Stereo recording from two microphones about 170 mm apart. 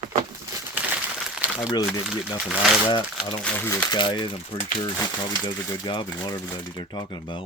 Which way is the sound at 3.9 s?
30° left (ahead or behind).